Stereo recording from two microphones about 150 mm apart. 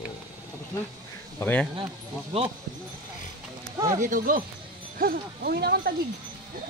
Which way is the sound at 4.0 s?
60° right (ahead or behind).